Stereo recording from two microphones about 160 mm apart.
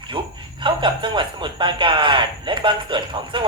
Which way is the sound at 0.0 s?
30° right (ahead or behind).